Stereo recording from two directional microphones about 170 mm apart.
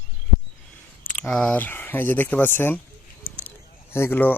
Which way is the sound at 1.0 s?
10° left (ahead or behind).